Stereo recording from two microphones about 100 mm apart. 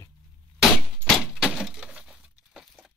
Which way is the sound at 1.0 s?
Centre (ahead or behind).